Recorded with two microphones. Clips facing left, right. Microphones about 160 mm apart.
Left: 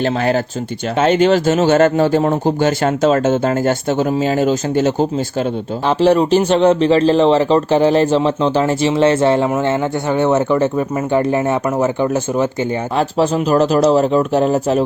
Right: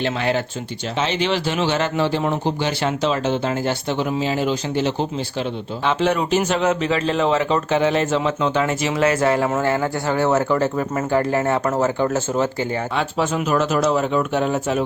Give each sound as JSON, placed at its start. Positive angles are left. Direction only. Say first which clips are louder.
{"t": 0.0, "sound": "speech", "louder": "left 5 dB", "side_deg": 40}
{"t": 13.0, "sound": "speech", "louder": "left 8 dB", "side_deg": 35}